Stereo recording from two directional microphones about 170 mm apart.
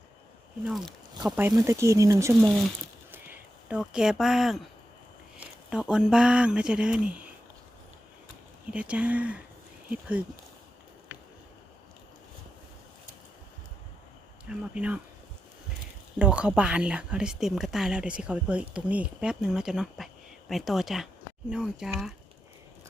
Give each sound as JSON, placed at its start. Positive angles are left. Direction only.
{"t": 0.6, "sound": "speech", "side_deg": 0}
{"t": 3.1, "sound": "a sound", "side_deg": -10}
{"t": 5.4, "sound": "speech", "side_deg": -5}
{"t": 8.7, "sound": "speech", "side_deg": -5}
{"t": 14.8, "sound": "speech", "side_deg": -5}
{"t": 16.1, "sound": "speech", "side_deg": -5}